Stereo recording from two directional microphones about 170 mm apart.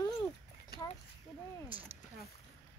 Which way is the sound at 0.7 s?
70° left (ahead or behind).